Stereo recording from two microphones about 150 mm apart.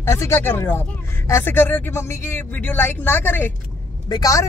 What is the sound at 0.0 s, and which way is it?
Speech, 15° left (ahead or behind).